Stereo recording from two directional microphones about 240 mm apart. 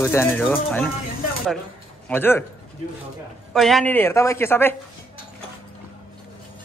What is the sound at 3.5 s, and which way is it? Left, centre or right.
A woman's voice, centre.